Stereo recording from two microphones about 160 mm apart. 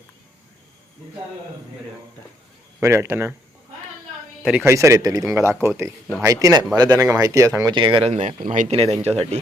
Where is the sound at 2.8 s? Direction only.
15° right (ahead or behind).